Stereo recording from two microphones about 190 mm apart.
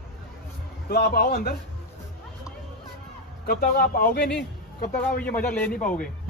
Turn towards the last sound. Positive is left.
turn(degrees=5)  # may be behind; listen again after turning